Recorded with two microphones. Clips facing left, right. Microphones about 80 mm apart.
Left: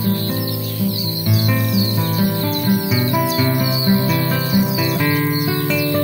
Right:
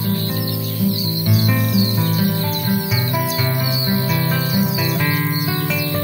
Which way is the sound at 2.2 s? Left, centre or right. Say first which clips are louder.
Left 1 dB; left.